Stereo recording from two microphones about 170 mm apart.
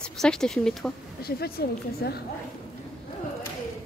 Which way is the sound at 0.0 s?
5° left (ahead or behind).